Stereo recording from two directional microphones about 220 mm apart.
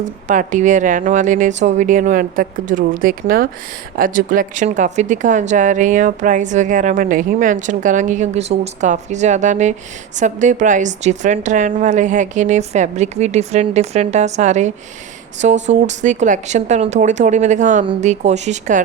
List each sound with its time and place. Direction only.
0.3 s speech: 35° right (ahead or behind)